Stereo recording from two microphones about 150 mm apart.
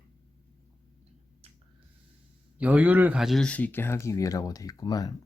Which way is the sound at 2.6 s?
10° right (ahead or behind).